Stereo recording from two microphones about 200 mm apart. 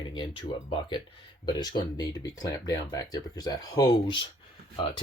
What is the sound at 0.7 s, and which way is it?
Speech, 25° left (ahead or behind).